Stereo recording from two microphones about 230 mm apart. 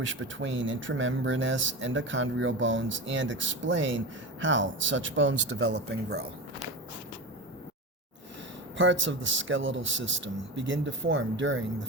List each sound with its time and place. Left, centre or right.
0.0 s speech: right
8.8 s a man's voice: right